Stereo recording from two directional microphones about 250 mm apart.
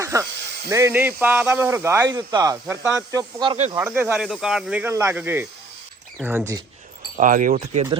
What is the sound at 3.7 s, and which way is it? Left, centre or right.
A man's voice, centre.